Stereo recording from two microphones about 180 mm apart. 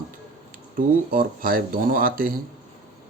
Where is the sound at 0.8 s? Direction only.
50° right (ahead or behind).